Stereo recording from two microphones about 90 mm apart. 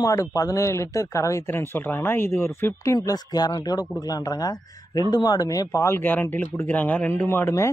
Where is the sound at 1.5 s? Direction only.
25° left (ahead or behind).